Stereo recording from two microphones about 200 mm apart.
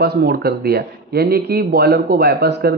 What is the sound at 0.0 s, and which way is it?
Speech, 55° right (ahead or behind).